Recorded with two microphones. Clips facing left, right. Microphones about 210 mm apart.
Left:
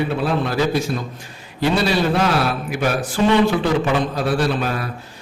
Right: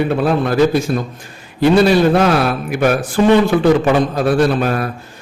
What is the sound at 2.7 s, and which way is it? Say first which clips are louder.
A man's voice: right 6 dB; 55° right (ahead or behind).